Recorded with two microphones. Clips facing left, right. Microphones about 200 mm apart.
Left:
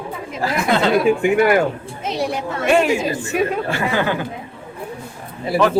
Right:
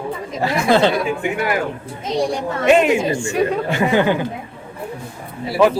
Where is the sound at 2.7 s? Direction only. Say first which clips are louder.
Right 2 dB; 20° right (ahead or behind).